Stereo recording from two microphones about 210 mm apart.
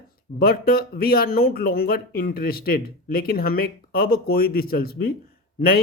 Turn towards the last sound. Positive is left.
turn(degrees=45)  # may be behind; listen again after turning